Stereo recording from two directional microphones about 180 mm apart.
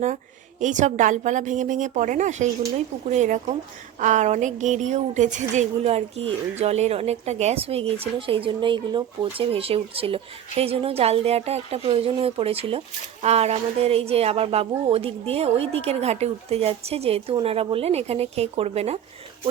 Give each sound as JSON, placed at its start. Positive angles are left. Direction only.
{"t": 0.6, "sound": "speech", "side_deg": -45}